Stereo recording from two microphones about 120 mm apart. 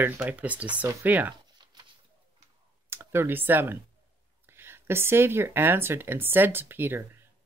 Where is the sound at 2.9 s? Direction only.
20° right (ahead or behind).